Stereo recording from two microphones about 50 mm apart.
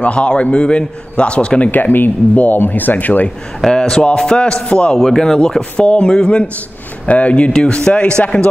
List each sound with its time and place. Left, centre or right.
0.0 s a man's voice: left
1.7 s speech: left
3.6 s a man's voice: centre